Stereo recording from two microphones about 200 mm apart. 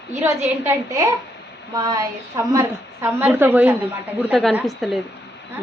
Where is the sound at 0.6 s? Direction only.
15° right (ahead or behind).